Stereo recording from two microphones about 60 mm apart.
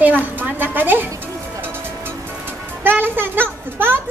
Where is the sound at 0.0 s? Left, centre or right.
Right.